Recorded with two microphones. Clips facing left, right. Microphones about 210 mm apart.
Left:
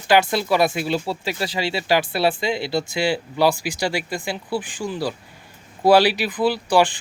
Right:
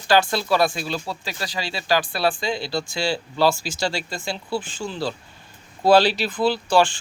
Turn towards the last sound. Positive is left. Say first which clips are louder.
# left 1 dB
turn(degrees=15)  # may be behind; listen again after turning